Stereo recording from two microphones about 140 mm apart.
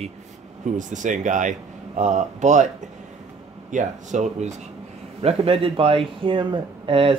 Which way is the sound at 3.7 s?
60° right (ahead or behind).